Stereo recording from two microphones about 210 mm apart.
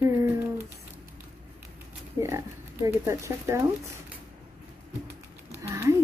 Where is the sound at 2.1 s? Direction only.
15° right (ahead or behind).